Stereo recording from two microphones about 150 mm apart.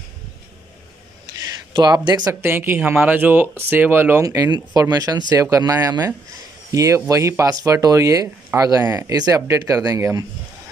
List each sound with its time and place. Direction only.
1.7 s speech: 30° right (ahead or behind)
2.4 s speech: 15° right (ahead or behind)